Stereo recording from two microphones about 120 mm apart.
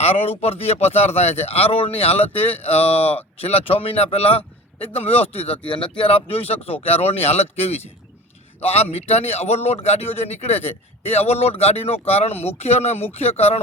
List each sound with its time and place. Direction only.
0.0 s speech: 55° left (ahead or behind)
6.0 s speech: 55° left (ahead or behind)